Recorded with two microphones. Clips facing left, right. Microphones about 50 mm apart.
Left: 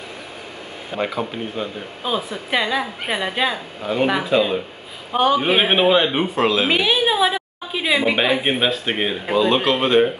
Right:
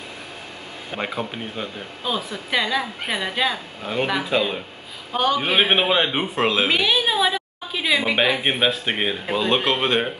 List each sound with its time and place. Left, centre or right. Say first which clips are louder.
0.9 s speech: left 4 dB; centre
2.0 s a woman's voice: left 3 dB; centre
3.8 s speech: left 4 dB; centre
5.1 s a woman's voice: left 3 dB; centre
6.3 s speech: left 1 dB; centre
6.7 s a woman's voice: left 2 dB; centre
8.2 s speech: left 1 dB; centre